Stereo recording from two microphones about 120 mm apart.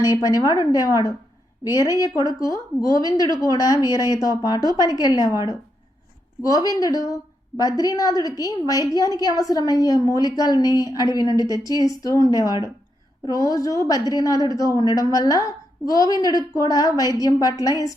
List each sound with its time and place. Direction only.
0.0 s a woman's voice: 30° left (ahead or behind)